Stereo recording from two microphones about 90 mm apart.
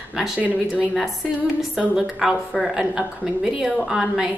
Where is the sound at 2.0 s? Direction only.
5° right (ahead or behind).